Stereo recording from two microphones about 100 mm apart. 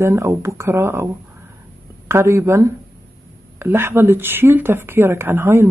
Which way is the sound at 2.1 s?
25° right (ahead or behind).